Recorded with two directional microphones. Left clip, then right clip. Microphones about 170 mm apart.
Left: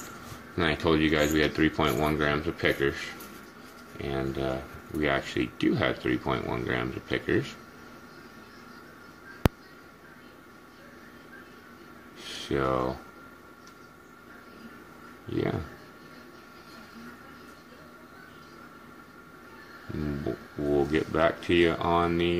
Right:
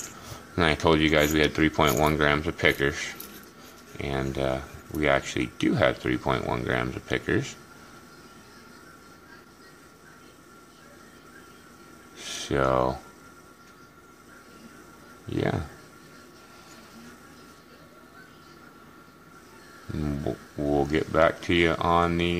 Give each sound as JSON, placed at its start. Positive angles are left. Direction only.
{"t": 0.6, "sound": "speech", "side_deg": -40}
{"t": 12.2, "sound": "a sound", "side_deg": -40}
{"t": 15.2, "sound": "speech", "side_deg": -35}
{"t": 20.7, "sound": "speech", "side_deg": -35}